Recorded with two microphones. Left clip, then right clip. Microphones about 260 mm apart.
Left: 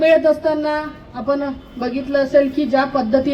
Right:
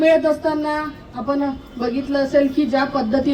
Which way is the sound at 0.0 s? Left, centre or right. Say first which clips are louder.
Left 2 dB; left.